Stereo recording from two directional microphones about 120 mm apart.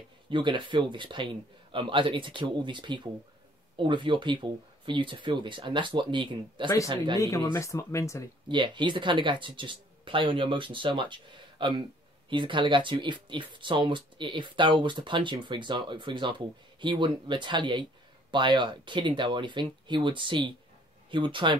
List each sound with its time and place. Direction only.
0.3 s speech: 40° right (ahead or behind)
7.2 s speech: 25° left (ahead or behind)
8.5 s speech: 40° right (ahead or behind)